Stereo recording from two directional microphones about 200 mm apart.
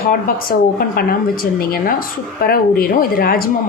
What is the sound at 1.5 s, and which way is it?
A woman's voice, 45° left (ahead or behind).